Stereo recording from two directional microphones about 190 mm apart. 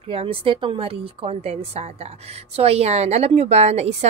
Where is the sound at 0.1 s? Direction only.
30° right (ahead or behind).